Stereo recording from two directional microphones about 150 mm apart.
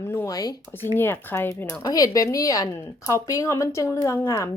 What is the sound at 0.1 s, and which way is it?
Speech, 20° left (ahead or behind).